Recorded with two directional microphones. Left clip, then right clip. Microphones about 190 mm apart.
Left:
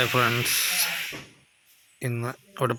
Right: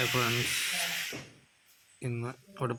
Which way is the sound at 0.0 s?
25° left (ahead or behind).